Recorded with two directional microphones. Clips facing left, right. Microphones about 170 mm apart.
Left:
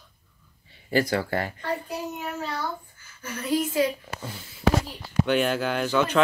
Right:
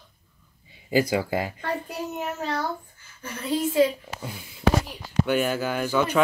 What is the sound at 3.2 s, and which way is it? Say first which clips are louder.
Speech: left 1 dB; 25° right (ahead or behind).